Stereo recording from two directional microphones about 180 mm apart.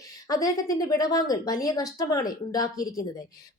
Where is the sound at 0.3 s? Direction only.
20° left (ahead or behind).